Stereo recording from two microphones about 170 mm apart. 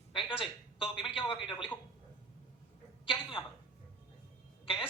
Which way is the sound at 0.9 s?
30° left (ahead or behind).